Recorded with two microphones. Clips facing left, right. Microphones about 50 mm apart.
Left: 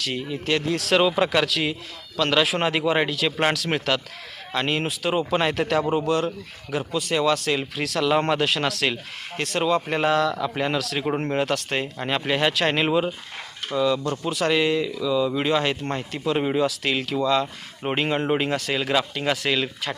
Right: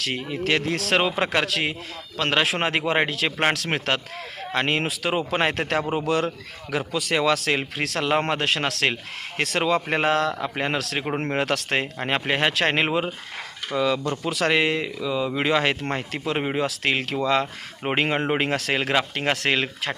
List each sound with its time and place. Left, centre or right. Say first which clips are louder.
0.0 s speech: right 1 dB; right
4.9 s speech: left 1 dB; right
6.1 s speech: even; right
7.6 s speech: left 2 dB; right
9.4 s speech: even; right
9.8 s speech: even; right
10.4 s speech: left 1 dB; right
11.9 s speech: left 3 dB; right
13.7 s speech: left 1 dB; right
15.4 s speech: right 1 dB; right